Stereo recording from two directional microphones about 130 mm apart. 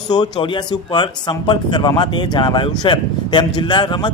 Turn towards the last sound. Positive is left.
turn(degrees=35)  # may be behind; listen again after turning